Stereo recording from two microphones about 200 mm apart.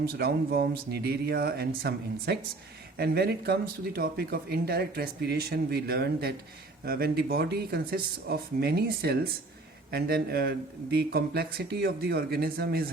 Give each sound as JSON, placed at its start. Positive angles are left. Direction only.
{"t": 0.0, "sound": "speech", "side_deg": -50}